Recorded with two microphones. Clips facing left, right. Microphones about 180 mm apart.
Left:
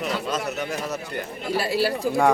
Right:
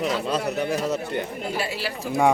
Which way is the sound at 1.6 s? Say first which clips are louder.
Left 6 dB; 40° left (ahead or behind).